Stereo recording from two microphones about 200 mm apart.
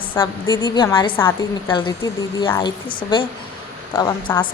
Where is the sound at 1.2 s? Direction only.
10° left (ahead or behind).